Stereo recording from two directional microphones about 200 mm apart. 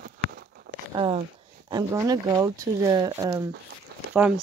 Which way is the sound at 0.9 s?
25° right (ahead or behind).